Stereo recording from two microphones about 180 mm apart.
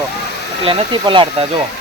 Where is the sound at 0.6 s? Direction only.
30° right (ahead or behind).